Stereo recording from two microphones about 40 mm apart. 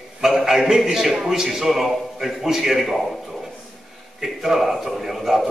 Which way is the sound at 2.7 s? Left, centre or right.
Centre.